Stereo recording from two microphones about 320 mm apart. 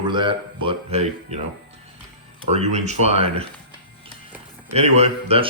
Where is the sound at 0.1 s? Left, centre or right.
Centre.